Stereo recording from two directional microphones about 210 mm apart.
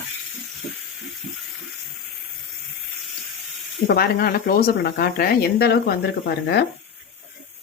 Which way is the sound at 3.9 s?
45° left (ahead or behind).